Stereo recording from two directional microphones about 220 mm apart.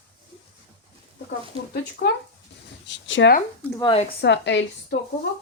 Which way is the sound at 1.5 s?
25° right (ahead or behind).